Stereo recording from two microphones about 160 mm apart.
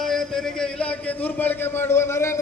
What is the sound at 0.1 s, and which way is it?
A man's voice, 5° left (ahead or behind).